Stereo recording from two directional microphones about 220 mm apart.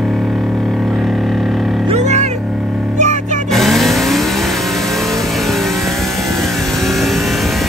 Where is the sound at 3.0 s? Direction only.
35° right (ahead or behind).